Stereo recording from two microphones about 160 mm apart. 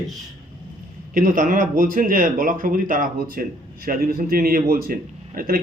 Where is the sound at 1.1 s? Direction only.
55° right (ahead or behind).